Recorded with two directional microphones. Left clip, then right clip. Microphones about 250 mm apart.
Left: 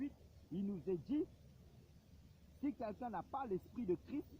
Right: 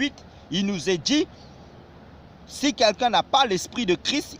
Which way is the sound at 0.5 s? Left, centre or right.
Right.